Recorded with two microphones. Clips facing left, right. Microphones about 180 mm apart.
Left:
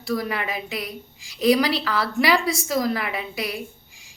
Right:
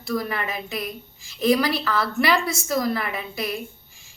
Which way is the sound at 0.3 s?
15° left (ahead or behind).